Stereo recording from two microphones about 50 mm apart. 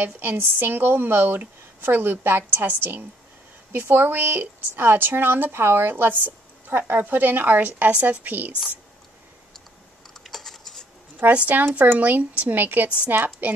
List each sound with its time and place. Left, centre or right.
0.0 s a woman's voice: right
10.2 s a sound: centre
11.3 s speech: right